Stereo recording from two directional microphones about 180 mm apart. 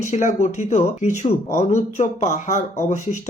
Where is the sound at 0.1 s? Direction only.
45° left (ahead or behind).